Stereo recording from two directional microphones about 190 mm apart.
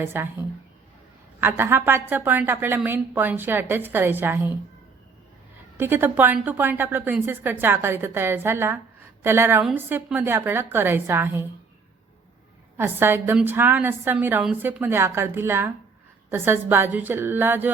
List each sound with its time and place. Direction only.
0.0 s a woman's voice: 10° right (ahead or behind)
5.7 s a woman's voice: 10° right (ahead or behind)
12.7 s a woman's voice: 10° right (ahead or behind)